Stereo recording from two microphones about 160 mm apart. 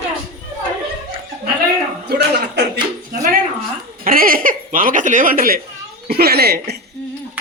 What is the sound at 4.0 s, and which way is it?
Speech, 60° right (ahead or behind).